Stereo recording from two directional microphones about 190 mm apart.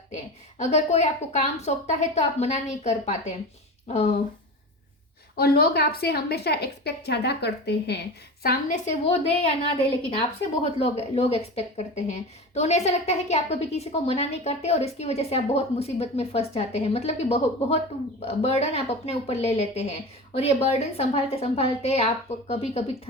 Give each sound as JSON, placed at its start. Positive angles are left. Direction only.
{"t": 0.6, "sound": "a woman's voice", "side_deg": 35}
{"t": 5.4, "sound": "a woman's voice", "side_deg": 55}